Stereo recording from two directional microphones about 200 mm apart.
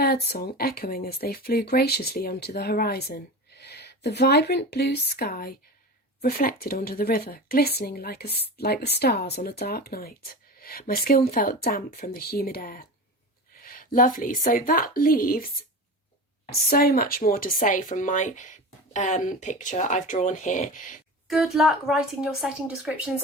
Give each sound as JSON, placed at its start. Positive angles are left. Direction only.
{"t": 0.0, "sound": "speech", "side_deg": 55}
{"t": 21.2, "sound": "a woman's voice", "side_deg": 0}